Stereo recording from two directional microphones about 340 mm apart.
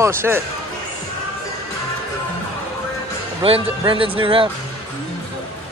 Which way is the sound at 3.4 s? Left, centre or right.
Centre.